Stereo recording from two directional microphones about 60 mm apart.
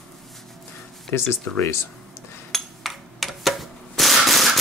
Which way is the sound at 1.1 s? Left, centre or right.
Left.